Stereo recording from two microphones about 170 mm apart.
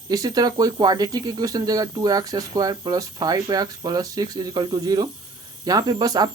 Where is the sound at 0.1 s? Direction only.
20° right (ahead or behind).